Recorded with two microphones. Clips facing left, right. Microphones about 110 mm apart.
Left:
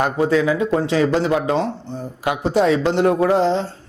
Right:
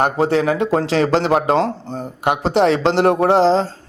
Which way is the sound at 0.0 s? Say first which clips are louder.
Right 1 dB; 65° right (ahead or behind).